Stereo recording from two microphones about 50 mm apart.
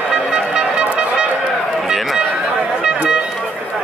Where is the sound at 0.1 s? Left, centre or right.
Centre.